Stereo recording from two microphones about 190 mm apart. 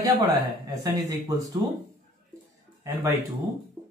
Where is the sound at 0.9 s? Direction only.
20° right (ahead or behind).